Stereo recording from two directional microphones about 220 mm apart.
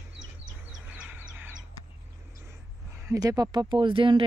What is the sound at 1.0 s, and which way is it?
Bird, 10° right (ahead or behind).